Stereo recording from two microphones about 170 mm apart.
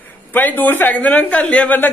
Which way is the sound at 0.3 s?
10° left (ahead or behind).